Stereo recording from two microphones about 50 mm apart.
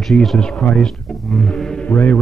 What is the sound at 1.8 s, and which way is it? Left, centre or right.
Speech, left.